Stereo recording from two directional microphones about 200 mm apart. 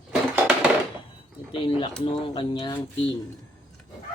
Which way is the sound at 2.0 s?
25° left (ahead or behind).